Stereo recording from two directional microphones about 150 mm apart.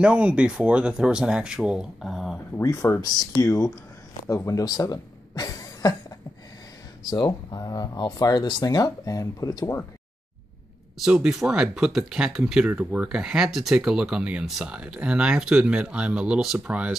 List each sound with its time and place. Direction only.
0.0 s speech: 10° right (ahead or behind)
2.6 s speech: 20° left (ahead or behind)
7.0 s speech: 25° left (ahead or behind)
11.0 s speech: 5° right (ahead or behind)